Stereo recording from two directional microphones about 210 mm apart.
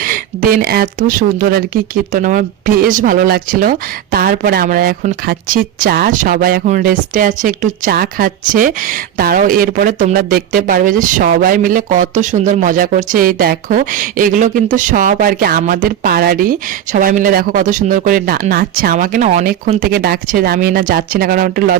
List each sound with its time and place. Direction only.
0.0 s speech: 45° right (ahead or behind)